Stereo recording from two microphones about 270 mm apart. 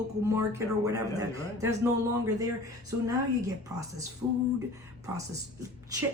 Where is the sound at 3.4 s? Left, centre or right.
Centre.